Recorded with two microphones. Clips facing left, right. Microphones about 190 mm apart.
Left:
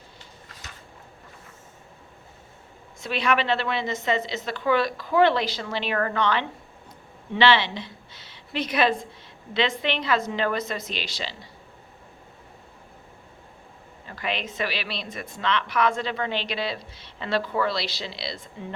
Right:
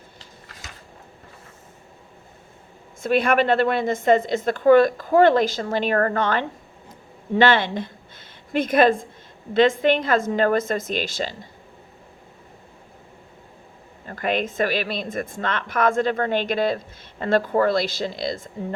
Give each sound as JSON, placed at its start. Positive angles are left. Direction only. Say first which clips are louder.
{"t": 3.0, "sound": "a woman's voice", "louder": "right 6 dB", "side_deg": -50}
{"t": 14.1, "sound": "a woman's voice", "louder": "right 7 dB", "side_deg": -50}